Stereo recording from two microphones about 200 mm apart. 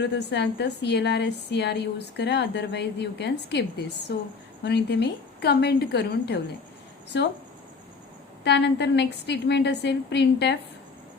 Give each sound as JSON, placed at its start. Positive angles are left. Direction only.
{"t": 0.0, "sound": "a woman's voice", "side_deg": 60}
{"t": 8.4, "sound": "a woman's voice", "side_deg": 60}